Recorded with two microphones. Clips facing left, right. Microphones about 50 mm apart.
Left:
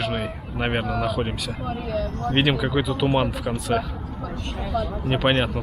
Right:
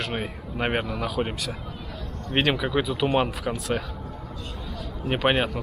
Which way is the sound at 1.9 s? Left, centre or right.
Left.